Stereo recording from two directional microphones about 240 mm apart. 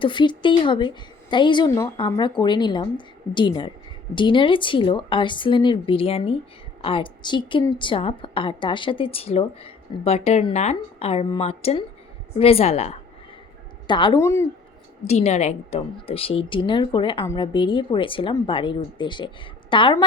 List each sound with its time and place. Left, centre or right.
0.0 s a woman's voice: centre
15.0 s a woman's voice: left